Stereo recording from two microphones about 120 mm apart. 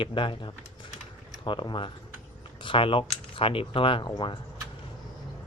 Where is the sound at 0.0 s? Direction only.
45° left (ahead or behind).